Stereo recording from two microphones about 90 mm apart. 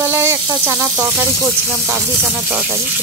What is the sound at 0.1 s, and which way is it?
Sizzle, 35° right (ahead or behind).